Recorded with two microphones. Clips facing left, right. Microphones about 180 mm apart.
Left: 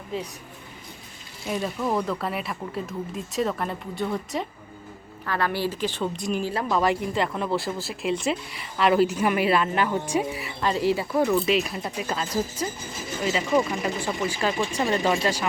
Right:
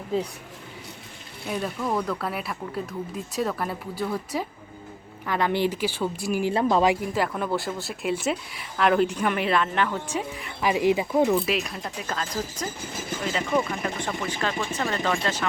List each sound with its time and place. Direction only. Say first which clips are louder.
1.5 s speech: left 1 dB; centre (ahead or behind)
5.2 s speech: right 2 dB; 20° right (ahead or behind)
6.5 s speech: right 6 dB; 30° right (ahead or behind)
7.1 s speech: even; centre (ahead or behind)
10.6 s speech: right 2 dB; 15° right (ahead or behind)
11.4 s speech: left 4 dB; centre (ahead or behind)
13.7 s speech: left 2 dB; 5° left (ahead or behind)